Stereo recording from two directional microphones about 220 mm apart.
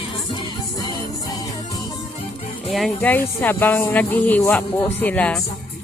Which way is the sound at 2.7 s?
Centre (ahead or behind).